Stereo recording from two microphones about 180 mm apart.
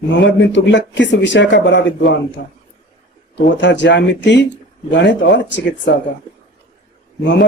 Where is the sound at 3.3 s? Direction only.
80° left.